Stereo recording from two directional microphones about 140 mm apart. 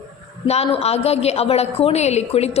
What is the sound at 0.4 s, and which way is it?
A woman's voice, 50° left (ahead or behind).